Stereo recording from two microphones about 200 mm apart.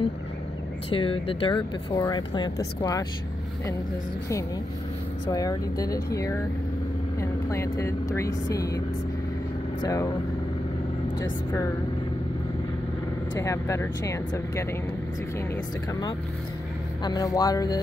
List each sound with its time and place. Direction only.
0.8 s speech: 25° left (ahead or behind)
5.2 s speech: 20° left (ahead or behind)
13.3 s speech: 15° left (ahead or behind)